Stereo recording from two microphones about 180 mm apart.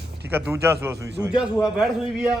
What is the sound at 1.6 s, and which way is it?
Speech, 5° right (ahead or behind).